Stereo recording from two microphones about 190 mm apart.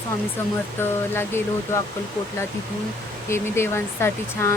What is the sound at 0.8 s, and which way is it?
Speech, 10° left (ahead or behind).